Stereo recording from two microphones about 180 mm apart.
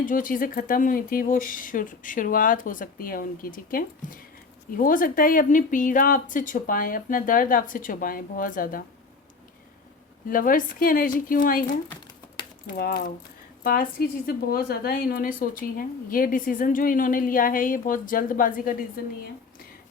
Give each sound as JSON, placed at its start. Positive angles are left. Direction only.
{"t": 0.0, "sound": "a woman's voice", "side_deg": 50}
{"t": 10.2, "sound": "a woman's voice", "side_deg": 50}
{"t": 12.4, "sound": "a sound", "side_deg": 25}
{"t": 12.7, "sound": "a woman's voice", "side_deg": 55}